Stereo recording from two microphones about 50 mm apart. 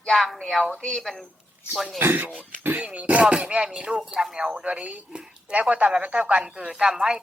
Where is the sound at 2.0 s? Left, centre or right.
Right.